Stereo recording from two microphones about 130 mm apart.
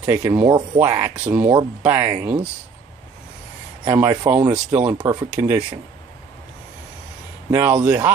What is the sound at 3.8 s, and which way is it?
Speech, 20° right (ahead or behind).